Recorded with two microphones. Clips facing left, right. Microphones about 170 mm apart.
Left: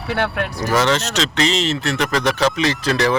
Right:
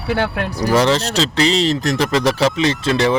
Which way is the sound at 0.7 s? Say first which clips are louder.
Right 2 dB; 35° right (ahead or behind).